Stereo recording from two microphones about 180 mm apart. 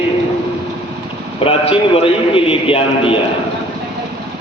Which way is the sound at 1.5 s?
30° left (ahead or behind).